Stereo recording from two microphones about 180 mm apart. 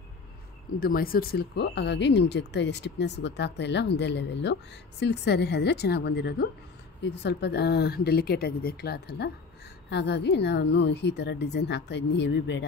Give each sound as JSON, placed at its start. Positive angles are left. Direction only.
{"t": 0.7, "sound": "speech", "side_deg": 55}